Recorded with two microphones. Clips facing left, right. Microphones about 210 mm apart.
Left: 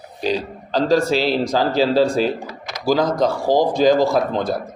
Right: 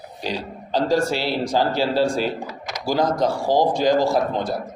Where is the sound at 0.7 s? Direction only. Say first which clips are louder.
Left 3 dB; 90° left.